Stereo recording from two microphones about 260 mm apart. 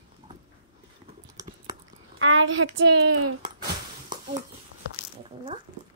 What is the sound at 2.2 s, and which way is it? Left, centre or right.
Speech, right.